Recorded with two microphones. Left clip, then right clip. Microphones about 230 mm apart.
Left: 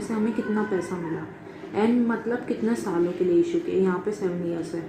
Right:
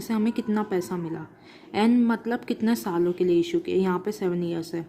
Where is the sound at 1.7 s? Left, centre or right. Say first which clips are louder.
Right 1 dB; right.